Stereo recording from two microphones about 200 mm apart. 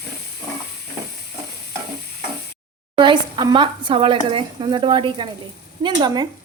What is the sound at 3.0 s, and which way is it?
Speech, 20° right (ahead or behind).